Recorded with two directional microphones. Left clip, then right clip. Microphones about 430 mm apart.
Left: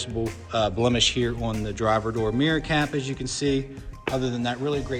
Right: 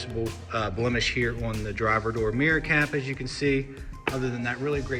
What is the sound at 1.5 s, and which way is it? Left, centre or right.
Speech, centre.